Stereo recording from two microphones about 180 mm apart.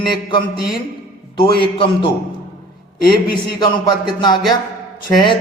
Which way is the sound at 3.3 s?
25° left (ahead or behind).